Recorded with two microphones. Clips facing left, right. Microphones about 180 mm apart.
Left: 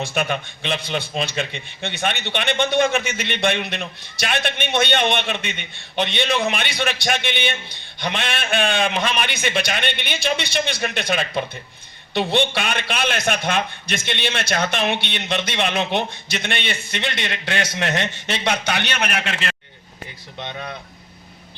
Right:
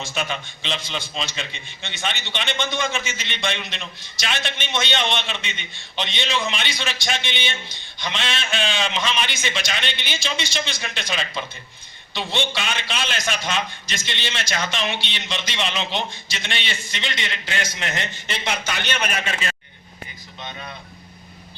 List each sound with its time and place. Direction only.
0.0 s a man's voice: 55° left (ahead or behind)